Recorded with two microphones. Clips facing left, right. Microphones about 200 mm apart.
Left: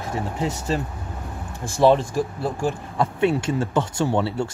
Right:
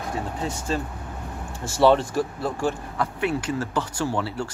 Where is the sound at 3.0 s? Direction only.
25° left (ahead or behind).